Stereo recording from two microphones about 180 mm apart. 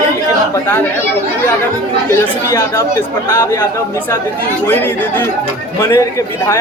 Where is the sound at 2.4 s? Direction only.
15° left (ahead or behind).